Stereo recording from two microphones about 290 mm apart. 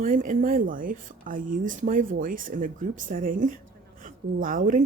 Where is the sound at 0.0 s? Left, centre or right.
Right.